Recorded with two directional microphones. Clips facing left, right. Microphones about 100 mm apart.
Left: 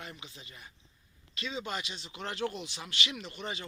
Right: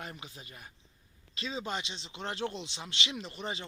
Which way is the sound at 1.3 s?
30° right (ahead or behind).